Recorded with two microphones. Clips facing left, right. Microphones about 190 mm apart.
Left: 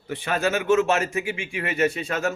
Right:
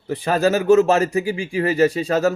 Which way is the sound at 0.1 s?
40° right (ahead or behind).